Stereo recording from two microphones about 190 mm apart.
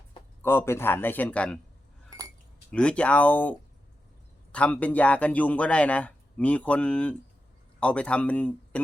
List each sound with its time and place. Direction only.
0.4 s speech: 15° left (ahead or behind)
2.0 s chink: 20° right (ahead or behind)
2.6 s speech: 5° left (ahead or behind)
4.5 s speech: 5° left (ahead or behind)